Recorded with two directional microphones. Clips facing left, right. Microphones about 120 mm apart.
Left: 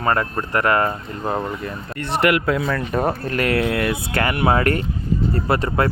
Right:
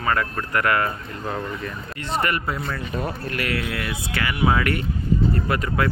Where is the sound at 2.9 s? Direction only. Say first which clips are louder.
Left 8 dB; 60° left (ahead or behind).